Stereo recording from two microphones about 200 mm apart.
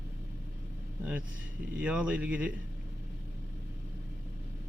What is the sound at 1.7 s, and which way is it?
Speech, 5° right (ahead or behind).